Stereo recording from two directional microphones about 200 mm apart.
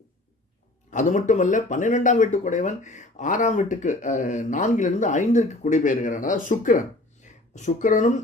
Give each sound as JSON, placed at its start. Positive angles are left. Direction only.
{"t": 0.9, "sound": "speech", "side_deg": 40}